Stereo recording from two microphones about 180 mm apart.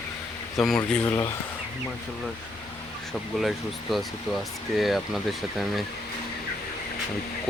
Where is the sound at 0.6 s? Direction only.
5° left (ahead or behind).